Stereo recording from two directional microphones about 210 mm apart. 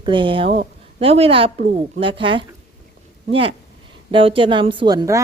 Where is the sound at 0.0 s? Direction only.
25° right (ahead or behind).